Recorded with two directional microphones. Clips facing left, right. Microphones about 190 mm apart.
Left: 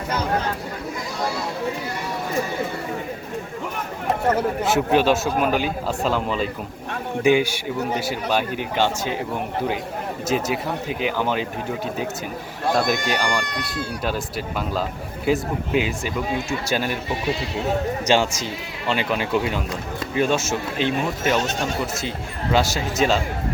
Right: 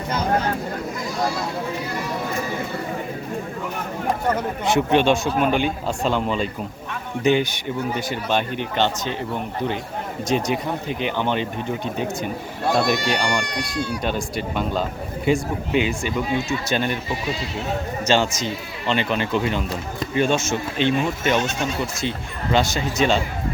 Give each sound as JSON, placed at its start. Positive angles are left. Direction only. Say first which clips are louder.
{"t": 4.4, "sound": "a man's voice", "louder": "left 1 dB", "side_deg": 5}
{"t": 10.2, "sound": "a man's voice", "louder": "right 1 dB", "side_deg": 5}
{"t": 12.7, "sound": "a man's voice", "louder": "right 1 dB", "side_deg": 0}
{"t": 13.4, "sound": "speech", "louder": "right 2 dB", "side_deg": 55}
{"t": 14.0, "sound": "a man's voice", "louder": "right 1 dB", "side_deg": 5}
{"t": 18.0, "sound": "a man's voice", "louder": "right 2 dB", "side_deg": 10}
{"t": 22.5, "sound": "a man's voice", "louder": "even", "side_deg": 5}